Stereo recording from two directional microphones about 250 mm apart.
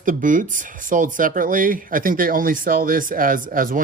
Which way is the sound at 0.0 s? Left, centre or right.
Right.